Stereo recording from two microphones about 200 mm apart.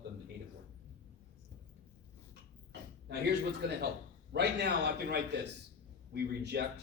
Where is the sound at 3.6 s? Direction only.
55° right (ahead or behind).